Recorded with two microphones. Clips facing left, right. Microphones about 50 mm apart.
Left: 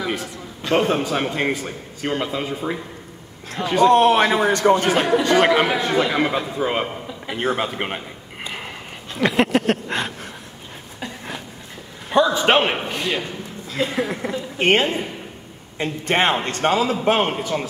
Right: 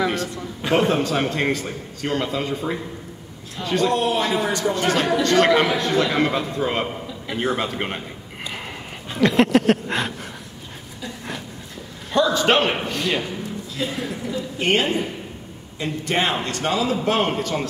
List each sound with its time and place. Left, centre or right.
0.0 s a man's voice: centre
3.9 s a man's voice: left
4.3 s a man's voice: left
4.8 s a man's voice: centre
7.1 s a man's voice: left
9.2 s a sound: centre
12.1 s a man's voice: centre
12.8 s a sound: centre
13.8 s a man's voice: left
17.3 s a man's voice: centre